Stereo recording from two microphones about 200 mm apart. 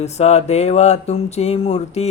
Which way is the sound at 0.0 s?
35° left (ahead or behind).